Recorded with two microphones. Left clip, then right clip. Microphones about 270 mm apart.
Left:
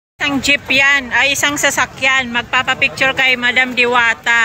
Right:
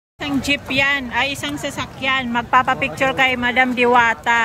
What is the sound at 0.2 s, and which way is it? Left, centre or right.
Speech, centre.